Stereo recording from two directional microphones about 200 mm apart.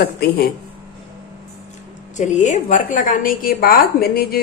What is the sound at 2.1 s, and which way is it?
A woman's voice, 35° left (ahead or behind).